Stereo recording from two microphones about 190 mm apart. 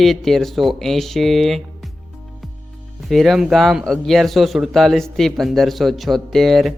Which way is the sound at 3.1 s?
Centre (ahead or behind).